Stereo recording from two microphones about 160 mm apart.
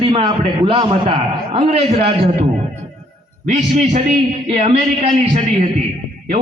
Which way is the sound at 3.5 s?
45° right (ahead or behind).